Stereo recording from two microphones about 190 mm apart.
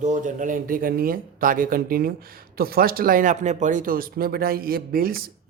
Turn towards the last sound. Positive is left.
turn(degrees=-50)  # may be behind; listen again after turning